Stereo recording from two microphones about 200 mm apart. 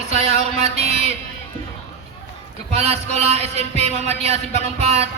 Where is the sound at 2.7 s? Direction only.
30° right (ahead or behind).